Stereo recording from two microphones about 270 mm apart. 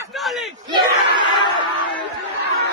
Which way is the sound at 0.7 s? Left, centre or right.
Centre.